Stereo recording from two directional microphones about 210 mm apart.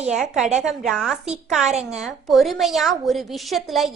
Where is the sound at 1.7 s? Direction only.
30° right (ahead or behind).